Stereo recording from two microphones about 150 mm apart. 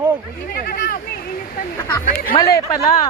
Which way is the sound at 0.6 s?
80° left.